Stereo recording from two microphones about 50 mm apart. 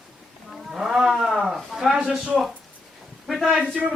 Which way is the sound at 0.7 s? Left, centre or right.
Centre.